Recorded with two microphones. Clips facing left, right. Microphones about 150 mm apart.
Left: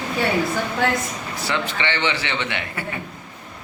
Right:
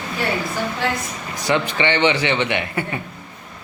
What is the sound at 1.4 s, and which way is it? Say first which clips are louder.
A man's voice: right 6 dB; 20° right (ahead or behind).